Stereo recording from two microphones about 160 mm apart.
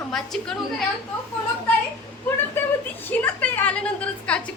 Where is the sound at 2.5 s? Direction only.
10° left (ahead or behind).